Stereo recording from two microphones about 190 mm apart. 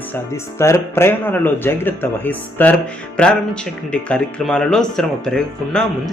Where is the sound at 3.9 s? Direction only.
5° left (ahead or behind).